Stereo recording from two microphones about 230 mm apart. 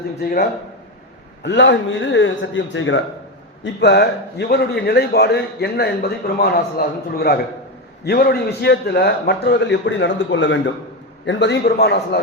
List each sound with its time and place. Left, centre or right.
0.2 s a man's voice: left